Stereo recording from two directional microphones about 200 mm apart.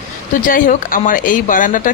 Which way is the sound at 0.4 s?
45° left (ahead or behind).